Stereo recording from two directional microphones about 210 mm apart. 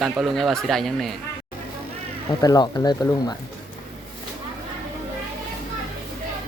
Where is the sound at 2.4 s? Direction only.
15° left (ahead or behind).